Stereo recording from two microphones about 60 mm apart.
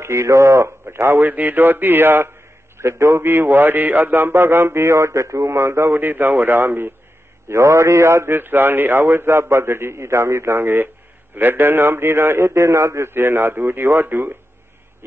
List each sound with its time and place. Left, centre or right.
0.0 s speech: right
1.3 s a man's voice: right
7.4 s a man's voice: right